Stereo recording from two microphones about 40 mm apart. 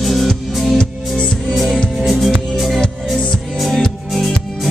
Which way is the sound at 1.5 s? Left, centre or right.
Centre.